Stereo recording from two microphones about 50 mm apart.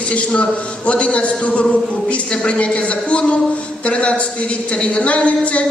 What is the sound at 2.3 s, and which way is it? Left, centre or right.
Speech, centre.